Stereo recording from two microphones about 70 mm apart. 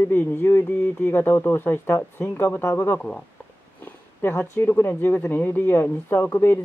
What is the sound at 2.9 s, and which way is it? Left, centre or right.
Speech, centre.